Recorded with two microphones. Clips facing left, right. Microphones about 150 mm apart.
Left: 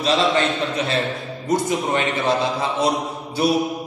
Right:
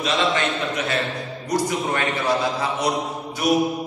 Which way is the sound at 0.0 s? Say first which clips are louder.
Left 3 dB; 30° left (ahead or behind).